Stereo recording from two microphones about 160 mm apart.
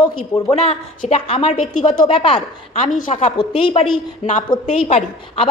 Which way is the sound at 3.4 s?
30° left (ahead or behind).